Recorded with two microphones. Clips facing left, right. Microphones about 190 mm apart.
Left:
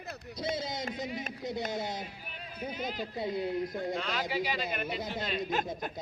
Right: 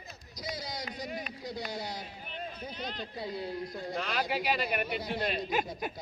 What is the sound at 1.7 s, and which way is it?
Speech, 20° left (ahead or behind).